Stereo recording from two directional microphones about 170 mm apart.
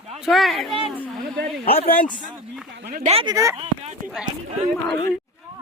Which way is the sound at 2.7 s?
70° right (ahead or behind).